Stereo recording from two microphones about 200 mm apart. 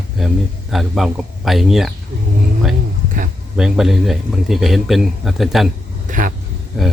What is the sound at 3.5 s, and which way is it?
A man's voice, centre (ahead or behind).